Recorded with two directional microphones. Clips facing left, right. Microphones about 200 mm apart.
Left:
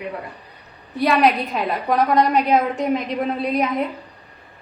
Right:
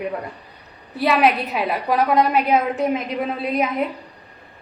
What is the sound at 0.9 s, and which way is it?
A woman's voice, 5° right (ahead or behind).